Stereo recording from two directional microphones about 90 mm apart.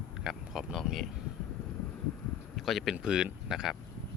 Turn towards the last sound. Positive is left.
turn(degrees=-5)  # may be behind; listen again after turning